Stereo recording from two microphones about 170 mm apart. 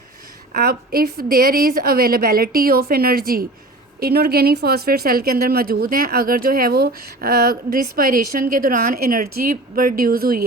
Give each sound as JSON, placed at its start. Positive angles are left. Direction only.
{"t": 0.5, "sound": "a woman's voice", "side_deg": -60}